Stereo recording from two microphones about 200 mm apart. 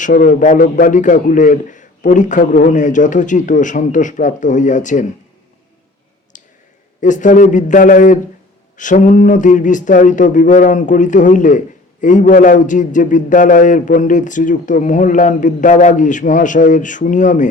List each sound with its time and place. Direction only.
0.0 s speech: 40° left (ahead or behind)
6.3 s clicking: 40° left (ahead or behind)
7.0 s speech: 40° left (ahead or behind)